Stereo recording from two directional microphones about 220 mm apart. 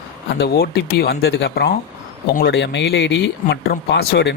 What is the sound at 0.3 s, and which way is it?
Speech, 45° left (ahead or behind).